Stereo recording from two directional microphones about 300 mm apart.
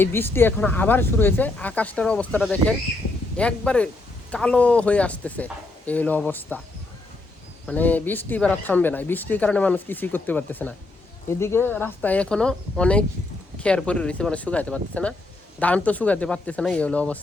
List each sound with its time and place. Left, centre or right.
0.0 s speech: centre
7.7 s speech: centre